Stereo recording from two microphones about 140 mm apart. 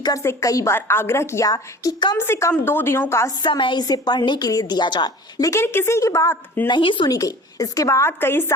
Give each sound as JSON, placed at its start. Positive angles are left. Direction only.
{"t": 0.0, "sound": "a woman's voice", "side_deg": 25}
{"t": 2.1, "sound": "a woman's voice", "side_deg": 15}
{"t": 3.4, "sound": "a woman's voice", "side_deg": 35}
{"t": 6.7, "sound": "a woman's voice", "side_deg": 35}